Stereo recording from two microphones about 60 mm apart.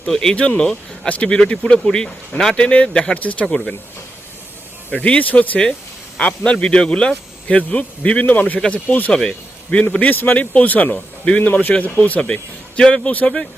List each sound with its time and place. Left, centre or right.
0.1 s speech: centre; by 3.4 s left
5.0 s speech: left
9.1 s a man's voice: centre
9.9 s speech: left
11.4 s speech: left